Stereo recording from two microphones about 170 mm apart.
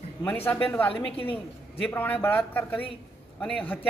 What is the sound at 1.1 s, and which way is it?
Speech, 30° left (ahead or behind).